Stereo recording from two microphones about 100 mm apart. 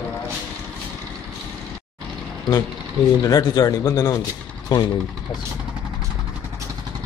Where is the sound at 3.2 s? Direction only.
35° left (ahead or behind).